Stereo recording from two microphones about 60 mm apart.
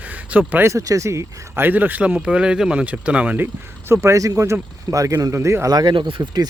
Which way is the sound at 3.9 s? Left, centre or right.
Right.